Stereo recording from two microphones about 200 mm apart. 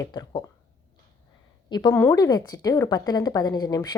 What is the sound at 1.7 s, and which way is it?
A woman's voice, 20° left (ahead or behind).